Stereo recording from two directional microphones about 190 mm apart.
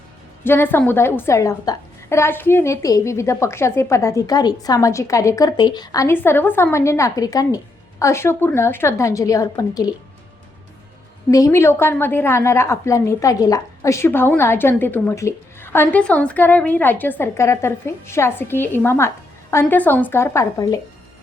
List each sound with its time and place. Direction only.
0.4 s a woman's voice: 10° left (ahead or behind)
11.3 s a woman's voice: 15° left (ahead or behind)